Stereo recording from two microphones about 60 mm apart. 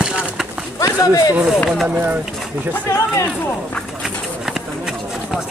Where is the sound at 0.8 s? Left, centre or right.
Left.